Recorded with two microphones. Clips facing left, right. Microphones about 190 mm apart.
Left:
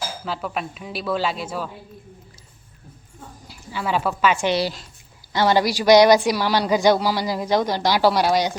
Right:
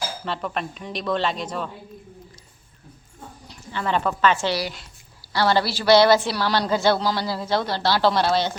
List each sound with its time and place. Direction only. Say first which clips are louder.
0.3 s speech: left 1 dB; 5° left (ahead or behind)
3.4 s a woman's voice: even; 5° left (ahead or behind)